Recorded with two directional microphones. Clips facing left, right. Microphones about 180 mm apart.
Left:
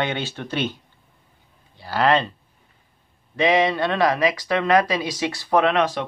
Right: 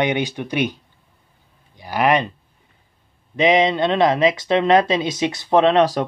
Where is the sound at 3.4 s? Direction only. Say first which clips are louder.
Right 3 dB; 20° right (ahead or behind).